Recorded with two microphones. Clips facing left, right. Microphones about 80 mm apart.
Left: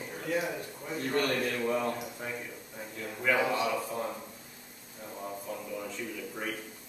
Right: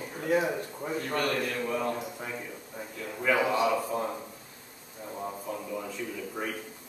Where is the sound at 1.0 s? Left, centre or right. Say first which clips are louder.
Left 1 dB; right.